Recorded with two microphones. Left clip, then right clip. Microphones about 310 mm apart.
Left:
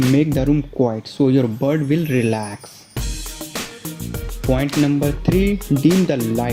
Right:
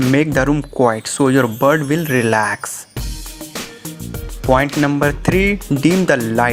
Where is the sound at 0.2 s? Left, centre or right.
Right.